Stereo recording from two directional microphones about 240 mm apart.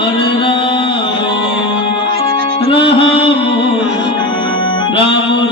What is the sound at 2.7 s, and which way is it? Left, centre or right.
Music, left.